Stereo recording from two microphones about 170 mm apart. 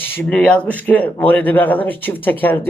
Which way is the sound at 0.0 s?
10° left (ahead or behind).